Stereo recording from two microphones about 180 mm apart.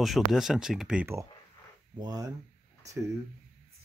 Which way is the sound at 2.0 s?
20° right (ahead or behind).